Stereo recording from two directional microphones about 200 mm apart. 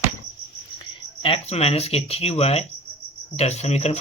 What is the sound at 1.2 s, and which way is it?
Speech, 30° left (ahead or behind).